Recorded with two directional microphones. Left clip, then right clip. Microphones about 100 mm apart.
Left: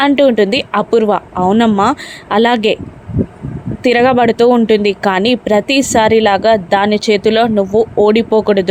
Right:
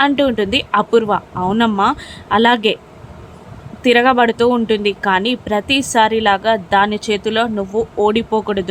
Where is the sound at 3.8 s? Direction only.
50° left (ahead or behind).